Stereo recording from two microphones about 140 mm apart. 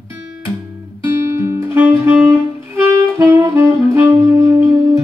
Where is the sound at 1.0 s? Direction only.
20° right (ahead or behind).